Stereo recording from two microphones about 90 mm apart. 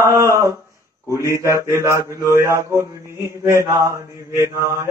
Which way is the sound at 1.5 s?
35° right (ahead or behind).